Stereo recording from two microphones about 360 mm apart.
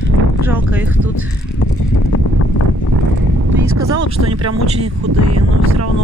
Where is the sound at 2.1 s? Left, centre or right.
Left.